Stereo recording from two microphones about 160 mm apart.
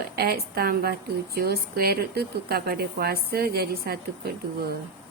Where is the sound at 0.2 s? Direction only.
75° right (ahead or behind).